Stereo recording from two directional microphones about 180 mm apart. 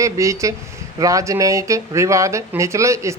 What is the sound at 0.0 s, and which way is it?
Speech, 15° right (ahead or behind).